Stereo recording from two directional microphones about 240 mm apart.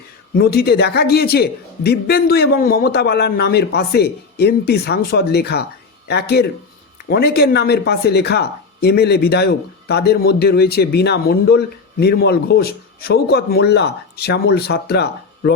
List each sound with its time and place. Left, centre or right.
0.3 s a man's voice: left